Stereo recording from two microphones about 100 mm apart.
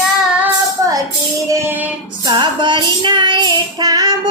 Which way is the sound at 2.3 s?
50° right (ahead or behind).